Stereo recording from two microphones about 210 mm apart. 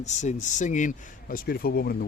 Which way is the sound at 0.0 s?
35° left (ahead or behind).